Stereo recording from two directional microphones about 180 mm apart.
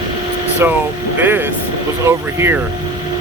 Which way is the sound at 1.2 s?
10° right (ahead or behind).